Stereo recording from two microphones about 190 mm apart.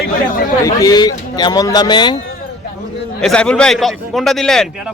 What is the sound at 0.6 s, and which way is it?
Speech, 20° left (ahead or behind).